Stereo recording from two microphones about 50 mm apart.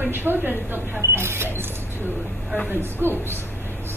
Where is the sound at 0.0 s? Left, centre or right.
Right.